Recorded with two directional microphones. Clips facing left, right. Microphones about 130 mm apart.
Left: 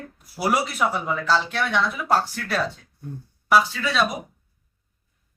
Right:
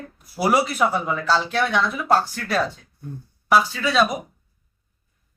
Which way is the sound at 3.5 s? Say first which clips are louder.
Right 1 dB; centre (ahead or behind).